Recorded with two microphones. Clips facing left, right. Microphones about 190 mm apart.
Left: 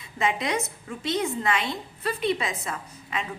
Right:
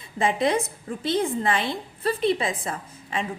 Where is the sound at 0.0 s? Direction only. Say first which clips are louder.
Right 4 dB; 30° right (ahead or behind).